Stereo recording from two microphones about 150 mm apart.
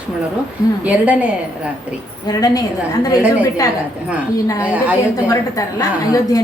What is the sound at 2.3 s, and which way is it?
Speech, 25° left (ahead or behind).